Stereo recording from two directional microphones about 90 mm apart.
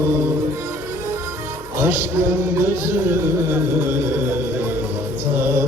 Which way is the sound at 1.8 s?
30° right (ahead or behind).